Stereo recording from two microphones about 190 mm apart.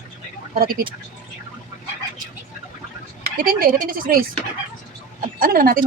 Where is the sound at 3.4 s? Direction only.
50° right (ahead or behind).